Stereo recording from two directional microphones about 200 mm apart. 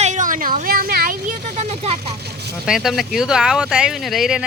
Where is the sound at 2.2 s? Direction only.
55° right (ahead or behind).